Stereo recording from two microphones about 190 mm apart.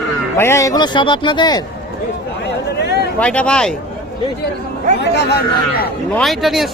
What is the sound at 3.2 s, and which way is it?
Speech, 5° left (ahead or behind).